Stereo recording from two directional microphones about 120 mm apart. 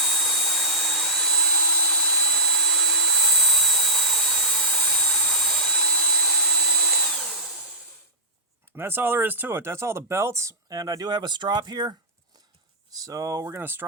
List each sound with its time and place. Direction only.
0.0 s a sound: centre (ahead or behind)
8.7 s speech: 20° right (ahead or behind); by 11.9 s 35° right (ahead or behind)
13.0 s speech: 30° right (ahead or behind)